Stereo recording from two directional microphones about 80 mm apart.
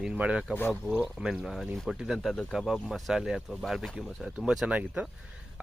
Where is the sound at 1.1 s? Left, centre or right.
Centre.